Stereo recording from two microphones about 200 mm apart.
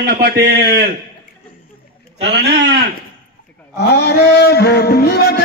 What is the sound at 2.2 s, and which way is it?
Speech, 60° right (ahead or behind).